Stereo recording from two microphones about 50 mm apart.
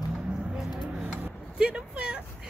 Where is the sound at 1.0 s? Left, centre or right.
Right.